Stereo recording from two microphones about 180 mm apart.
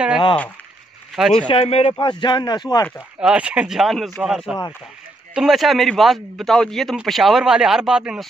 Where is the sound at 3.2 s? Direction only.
5° right (ahead or behind).